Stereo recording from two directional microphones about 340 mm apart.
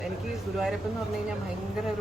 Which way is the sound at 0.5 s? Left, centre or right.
Centre.